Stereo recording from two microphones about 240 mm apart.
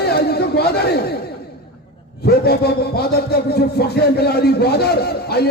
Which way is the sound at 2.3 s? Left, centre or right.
Left.